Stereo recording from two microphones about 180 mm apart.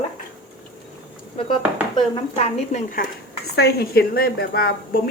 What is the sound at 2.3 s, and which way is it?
Speech, 35° left (ahead or behind).